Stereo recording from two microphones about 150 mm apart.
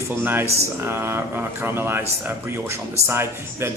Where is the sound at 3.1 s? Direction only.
15° right (ahead or behind).